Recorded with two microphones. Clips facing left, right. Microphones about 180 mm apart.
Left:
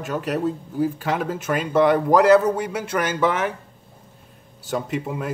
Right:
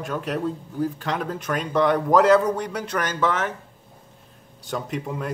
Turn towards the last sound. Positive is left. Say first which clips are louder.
# left 2 dB
turn(degrees=5)  # may be behind; listen again after turning